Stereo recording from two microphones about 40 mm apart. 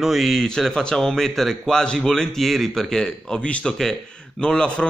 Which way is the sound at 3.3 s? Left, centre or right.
Left.